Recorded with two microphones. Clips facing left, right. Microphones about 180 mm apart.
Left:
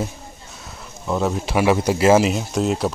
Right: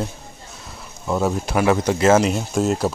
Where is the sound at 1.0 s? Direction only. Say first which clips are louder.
Right 1 dB; centre (ahead or behind).